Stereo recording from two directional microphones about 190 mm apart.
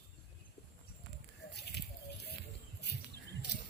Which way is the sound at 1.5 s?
60° left (ahead or behind).